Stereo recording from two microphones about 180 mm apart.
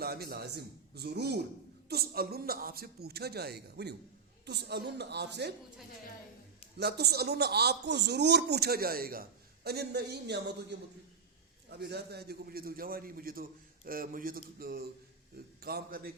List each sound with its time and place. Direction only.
0.0 s a man's voice: 60° right (ahead or behind)
6.7 s a man's voice: 65° right (ahead or behind)